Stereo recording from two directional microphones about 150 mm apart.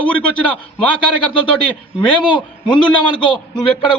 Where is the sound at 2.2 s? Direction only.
30° left (ahead or behind).